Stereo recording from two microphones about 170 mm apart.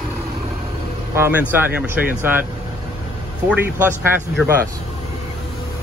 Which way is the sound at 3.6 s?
15° right (ahead or behind).